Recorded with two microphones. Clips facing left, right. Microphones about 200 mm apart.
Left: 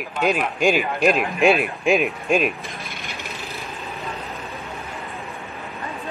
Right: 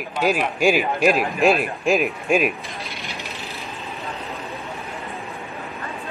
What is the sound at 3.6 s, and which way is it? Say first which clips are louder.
Vehicle: even; centre (ahead or behind).